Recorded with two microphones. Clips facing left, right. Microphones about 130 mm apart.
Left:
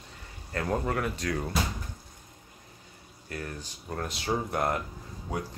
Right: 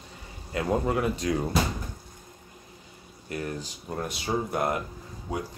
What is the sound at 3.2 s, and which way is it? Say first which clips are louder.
Speech: right 5 dB; 15° right (ahead or behind).